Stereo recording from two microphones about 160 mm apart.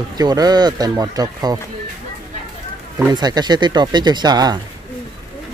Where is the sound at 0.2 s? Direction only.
25° right (ahead or behind).